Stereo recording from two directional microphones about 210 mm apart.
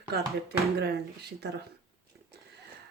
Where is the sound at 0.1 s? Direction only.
50° right (ahead or behind).